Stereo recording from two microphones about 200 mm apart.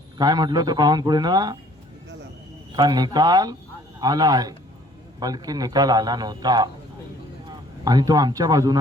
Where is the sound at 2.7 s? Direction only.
20° right (ahead or behind).